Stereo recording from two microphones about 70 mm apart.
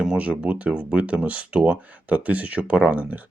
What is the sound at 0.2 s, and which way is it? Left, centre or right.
Speech, centre.